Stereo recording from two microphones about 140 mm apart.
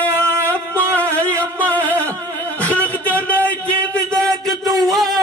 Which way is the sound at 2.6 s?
10° left (ahead or behind).